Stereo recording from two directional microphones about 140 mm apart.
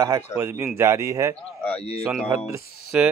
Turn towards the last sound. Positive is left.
turn(degrees=-10)  # may be behind; listen again after turning